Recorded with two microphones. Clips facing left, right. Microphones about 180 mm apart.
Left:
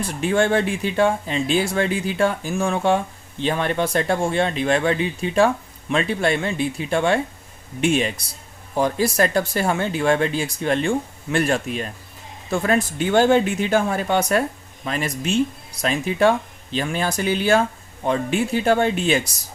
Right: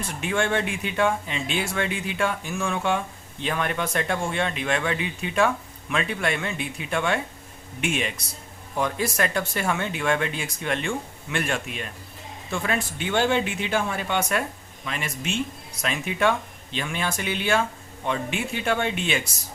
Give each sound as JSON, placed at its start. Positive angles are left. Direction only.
{"t": 0.2, "sound": "speech", "side_deg": 35}